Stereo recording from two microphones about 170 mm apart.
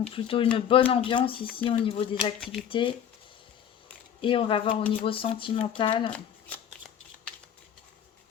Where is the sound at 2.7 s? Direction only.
30° left (ahead or behind).